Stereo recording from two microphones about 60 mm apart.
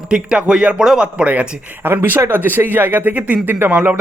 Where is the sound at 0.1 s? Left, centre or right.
Centre.